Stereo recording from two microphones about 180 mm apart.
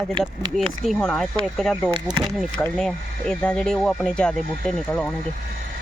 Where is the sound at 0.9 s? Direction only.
5° left (ahead or behind).